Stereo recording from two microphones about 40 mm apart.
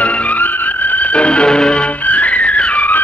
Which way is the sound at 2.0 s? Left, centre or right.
Left.